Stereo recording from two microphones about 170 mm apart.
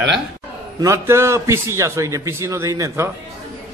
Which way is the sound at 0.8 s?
15° right (ahead or behind).